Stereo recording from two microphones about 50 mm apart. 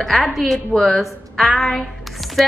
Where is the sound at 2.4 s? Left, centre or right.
Centre.